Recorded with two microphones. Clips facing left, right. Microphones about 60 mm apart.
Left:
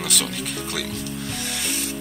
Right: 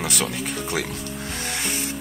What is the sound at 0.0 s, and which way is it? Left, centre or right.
Speech, centre.